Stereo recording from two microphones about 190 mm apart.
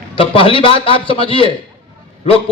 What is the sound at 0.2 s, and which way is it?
A man's voice, 30° left (ahead or behind).